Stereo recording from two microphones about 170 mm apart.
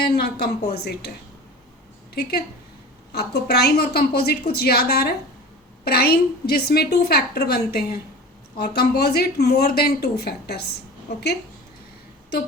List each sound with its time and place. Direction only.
0.0 s a woman's voice: 65° left (ahead or behind)
3.1 s a woman's voice: 70° left (ahead or behind)